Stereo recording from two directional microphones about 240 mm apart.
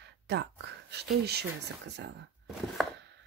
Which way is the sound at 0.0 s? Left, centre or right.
Right.